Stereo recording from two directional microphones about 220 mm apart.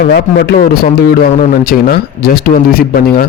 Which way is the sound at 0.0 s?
45° left (ahead or behind).